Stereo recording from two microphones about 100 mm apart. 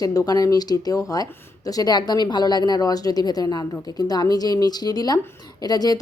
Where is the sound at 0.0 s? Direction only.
40° left (ahead or behind).